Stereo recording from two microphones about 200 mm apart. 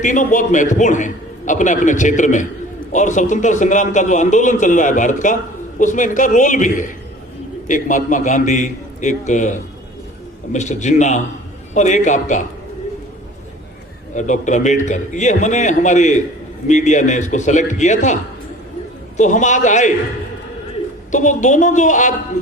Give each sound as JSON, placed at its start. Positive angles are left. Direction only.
{"t": 0.0, "sound": "a man's voice", "side_deg": 40}
{"t": 14.2, "sound": "a man's voice", "side_deg": 40}
{"t": 21.1, "sound": "a man's voice", "side_deg": 40}